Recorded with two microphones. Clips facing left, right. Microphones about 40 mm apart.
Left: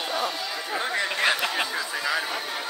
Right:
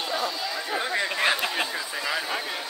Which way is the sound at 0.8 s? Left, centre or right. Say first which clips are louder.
Left 1 dB; left.